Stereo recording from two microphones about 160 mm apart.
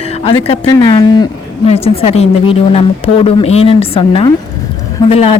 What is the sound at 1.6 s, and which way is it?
A woman's voice, 40° left (ahead or behind).